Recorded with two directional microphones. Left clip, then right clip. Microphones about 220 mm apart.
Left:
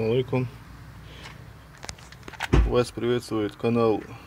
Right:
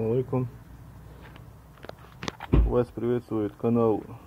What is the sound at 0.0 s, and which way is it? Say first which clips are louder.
Speech: left 2 dB; 5° left (ahead or behind).